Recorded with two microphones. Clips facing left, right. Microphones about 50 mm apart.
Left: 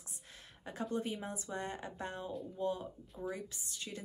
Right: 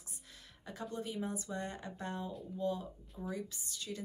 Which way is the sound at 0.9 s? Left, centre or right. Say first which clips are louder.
Even; left.